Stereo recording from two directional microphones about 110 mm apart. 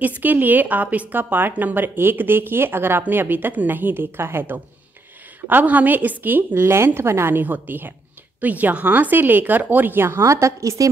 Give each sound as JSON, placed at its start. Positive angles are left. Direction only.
{"t": 0.0, "sound": "speech", "side_deg": -15}